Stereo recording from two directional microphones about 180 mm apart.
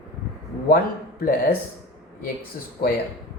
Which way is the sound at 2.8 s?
55° left (ahead or behind).